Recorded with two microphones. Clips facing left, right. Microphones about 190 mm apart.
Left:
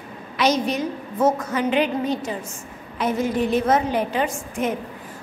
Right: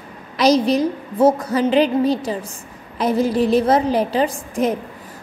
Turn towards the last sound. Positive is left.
turn(degrees=-35)  # may be behind; listen again after turning